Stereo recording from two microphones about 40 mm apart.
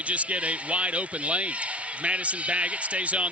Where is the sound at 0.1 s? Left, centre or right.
Right.